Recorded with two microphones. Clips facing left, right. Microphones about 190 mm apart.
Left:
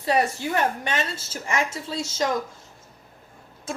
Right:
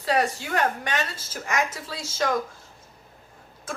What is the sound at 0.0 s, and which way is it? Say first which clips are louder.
Speech: left 1 dB; 25° left (ahead or behind).